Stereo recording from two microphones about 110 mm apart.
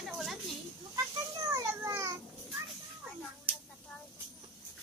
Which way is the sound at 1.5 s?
30° right (ahead or behind).